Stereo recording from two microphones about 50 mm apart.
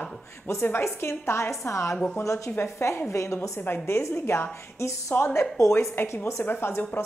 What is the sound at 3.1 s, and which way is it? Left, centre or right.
A woman's voice, left.